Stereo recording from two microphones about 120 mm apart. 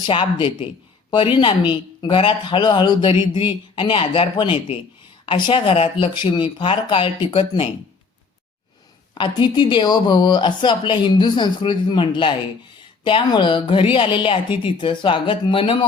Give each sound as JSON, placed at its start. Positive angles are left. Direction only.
{"t": 0.0, "sound": "speech", "side_deg": 45}
{"t": 6.1, "sound": "speech", "side_deg": 40}
{"t": 9.1, "sound": "speech", "side_deg": 40}